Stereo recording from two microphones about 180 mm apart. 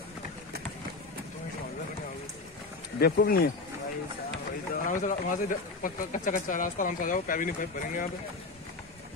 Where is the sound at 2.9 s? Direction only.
60° left (ahead or behind).